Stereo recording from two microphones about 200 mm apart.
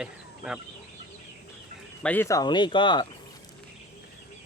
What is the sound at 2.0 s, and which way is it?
Speech, 10° left (ahead or behind).